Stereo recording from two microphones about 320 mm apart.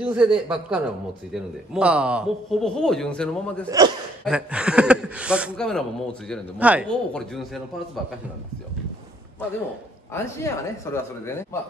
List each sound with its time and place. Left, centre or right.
0.0 s speech: centre
3.6 s a man's voice: centre
10.1 s speech: centre